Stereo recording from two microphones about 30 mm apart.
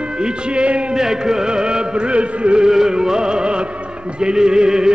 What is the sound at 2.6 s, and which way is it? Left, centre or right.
Music, right.